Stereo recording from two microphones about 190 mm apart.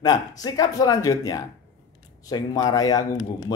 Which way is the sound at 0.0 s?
20° left (ahead or behind).